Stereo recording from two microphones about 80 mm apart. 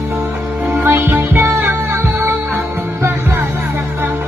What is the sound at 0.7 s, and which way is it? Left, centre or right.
Music, right.